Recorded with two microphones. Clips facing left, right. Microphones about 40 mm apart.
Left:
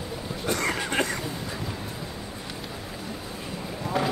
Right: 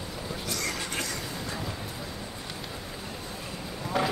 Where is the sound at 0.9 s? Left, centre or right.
Left.